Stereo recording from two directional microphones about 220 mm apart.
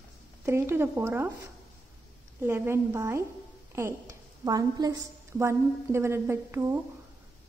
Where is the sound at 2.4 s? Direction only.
10° right (ahead or behind).